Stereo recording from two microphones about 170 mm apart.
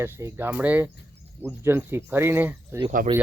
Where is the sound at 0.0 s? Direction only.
15° right (ahead or behind).